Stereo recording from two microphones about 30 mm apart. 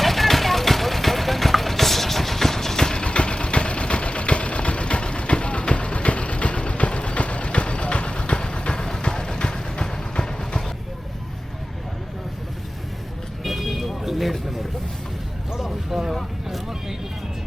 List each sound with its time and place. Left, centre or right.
0.0 s vehicle: centre
3.0 s vehicle: left
13.4 s vehicle: centre
15.5 s vehicle: centre
16.5 s vehicle: centre